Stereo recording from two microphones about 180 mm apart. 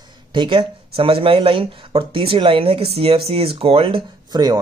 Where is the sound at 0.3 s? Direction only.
25° right (ahead or behind).